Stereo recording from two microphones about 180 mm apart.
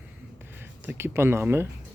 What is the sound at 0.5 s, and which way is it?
Speech, 10° right (ahead or behind).